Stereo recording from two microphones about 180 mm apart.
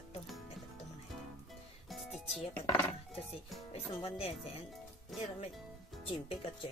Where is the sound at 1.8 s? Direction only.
Centre (ahead or behind).